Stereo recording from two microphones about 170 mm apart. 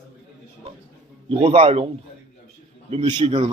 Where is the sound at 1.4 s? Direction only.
35° right (ahead or behind).